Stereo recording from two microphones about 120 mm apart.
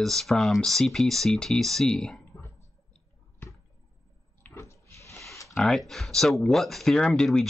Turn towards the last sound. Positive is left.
turn(degrees=5)  # may be behind; listen again after turning